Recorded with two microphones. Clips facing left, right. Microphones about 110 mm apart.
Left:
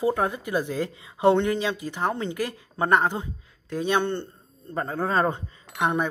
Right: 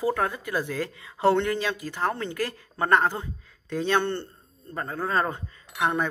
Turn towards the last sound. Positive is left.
turn(degrees=15)  # may be behind; listen again after turning